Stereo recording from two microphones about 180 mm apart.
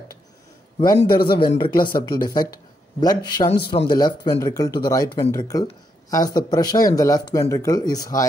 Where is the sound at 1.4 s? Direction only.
25° left (ahead or behind).